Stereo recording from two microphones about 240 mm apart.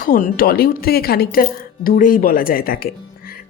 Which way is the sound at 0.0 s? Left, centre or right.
Left.